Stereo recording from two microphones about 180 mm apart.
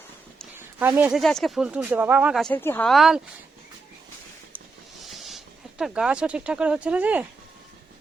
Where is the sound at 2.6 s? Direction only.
10° left (ahead or behind).